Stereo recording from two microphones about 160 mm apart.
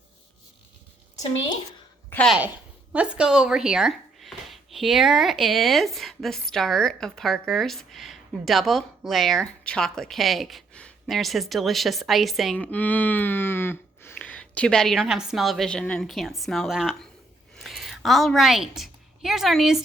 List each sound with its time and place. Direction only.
1.1 s a woman's voice: 20° left (ahead or behind)
2.0 s a sound: 10° left (ahead or behind)
2.9 s a woman's voice: 10° right (ahead or behind)